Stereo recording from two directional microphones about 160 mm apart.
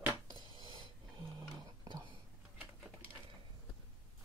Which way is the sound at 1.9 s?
30° right (ahead or behind).